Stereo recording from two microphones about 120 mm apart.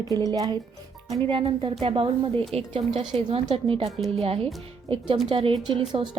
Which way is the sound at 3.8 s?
Centre (ahead or behind).